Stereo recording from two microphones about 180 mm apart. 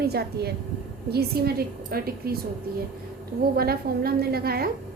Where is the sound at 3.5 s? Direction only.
60° right (ahead or behind).